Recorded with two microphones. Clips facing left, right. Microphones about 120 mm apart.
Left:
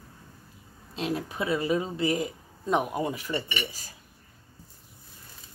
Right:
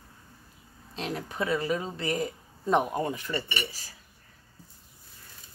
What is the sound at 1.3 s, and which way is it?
Speech, 15° left (ahead or behind).